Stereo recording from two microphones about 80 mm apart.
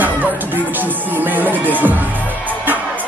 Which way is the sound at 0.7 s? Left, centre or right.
Right.